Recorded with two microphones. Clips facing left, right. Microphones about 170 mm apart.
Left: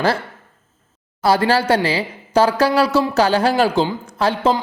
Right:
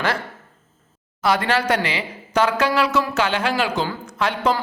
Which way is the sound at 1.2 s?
35° left (ahead or behind).